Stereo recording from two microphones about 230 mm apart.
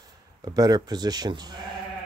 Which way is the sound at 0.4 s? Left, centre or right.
Centre.